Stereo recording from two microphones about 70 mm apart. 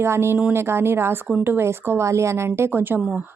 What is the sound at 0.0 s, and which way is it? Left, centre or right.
A woman's voice, right.